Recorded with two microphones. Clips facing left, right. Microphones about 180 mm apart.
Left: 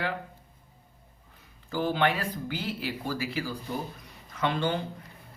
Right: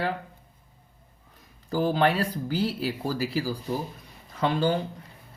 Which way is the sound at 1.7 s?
40° right (ahead or behind).